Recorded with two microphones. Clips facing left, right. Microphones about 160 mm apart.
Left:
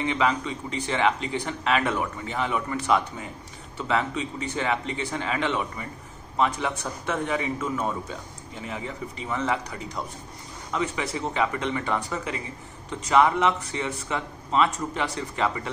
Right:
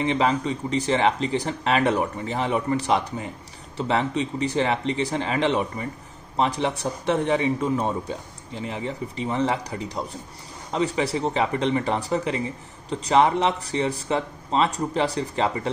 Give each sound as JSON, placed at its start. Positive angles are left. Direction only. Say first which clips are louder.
{"t": 0.0, "sound": "speech", "louder": "right 3 dB", "side_deg": -35}